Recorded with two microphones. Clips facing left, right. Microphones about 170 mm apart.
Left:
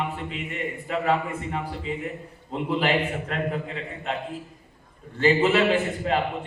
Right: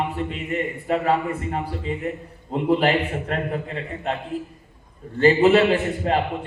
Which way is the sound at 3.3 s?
40° right (ahead or behind).